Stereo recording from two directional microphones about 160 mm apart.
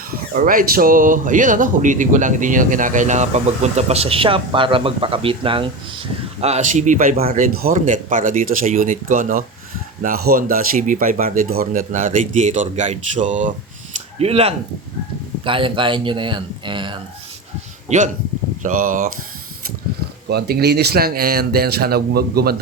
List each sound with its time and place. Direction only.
0.1 s a man's voice: 60° right (ahead or behind)
14.2 s speech: 40° right (ahead or behind)
17.8 s a man's voice: 50° right (ahead or behind)
20.2 s speech: 90° right